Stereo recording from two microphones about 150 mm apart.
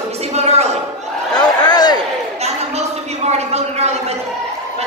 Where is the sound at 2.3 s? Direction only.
45° right (ahead or behind).